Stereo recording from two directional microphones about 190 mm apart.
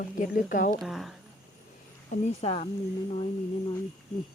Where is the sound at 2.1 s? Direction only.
35° left (ahead or behind).